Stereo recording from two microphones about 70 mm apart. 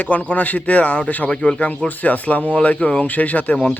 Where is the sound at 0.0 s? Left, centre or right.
Left.